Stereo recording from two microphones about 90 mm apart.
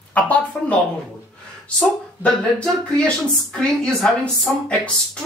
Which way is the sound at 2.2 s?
15° left (ahead or behind).